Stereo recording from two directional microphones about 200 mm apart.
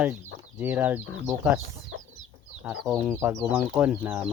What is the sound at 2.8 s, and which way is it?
Speech, 5° right (ahead or behind).